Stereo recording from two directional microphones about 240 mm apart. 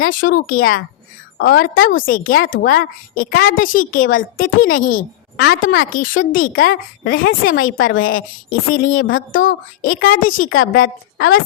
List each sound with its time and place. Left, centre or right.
0.2 s a woman's voice: left
6.7 s a woman's voice: left
7.3 s a woman's voice: left
9.0 s a woman's voice: left
9.4 s a woman's voice: left